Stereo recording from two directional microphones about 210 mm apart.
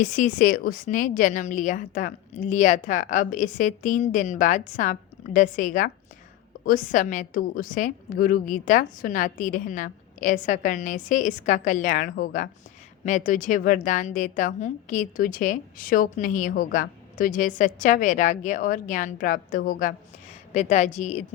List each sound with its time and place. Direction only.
0.0 s a woman's voice: 40° left (ahead or behind)